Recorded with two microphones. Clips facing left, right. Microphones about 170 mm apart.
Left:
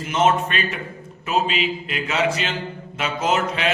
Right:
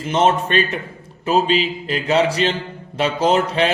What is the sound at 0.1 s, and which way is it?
A man's voice, 35° right (ahead or behind).